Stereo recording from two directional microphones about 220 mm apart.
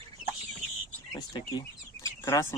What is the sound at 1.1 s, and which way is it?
Chicken, 15° left (ahead or behind).